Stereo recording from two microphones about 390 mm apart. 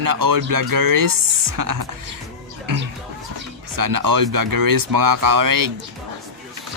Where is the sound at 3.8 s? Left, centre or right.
Right.